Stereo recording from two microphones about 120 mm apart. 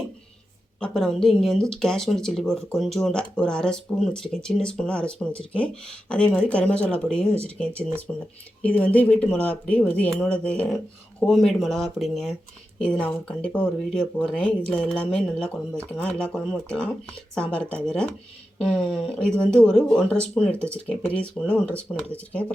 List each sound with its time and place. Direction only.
0.8 s speech: 5° left (ahead or behind)
8.6 s speech: 10° left (ahead or behind)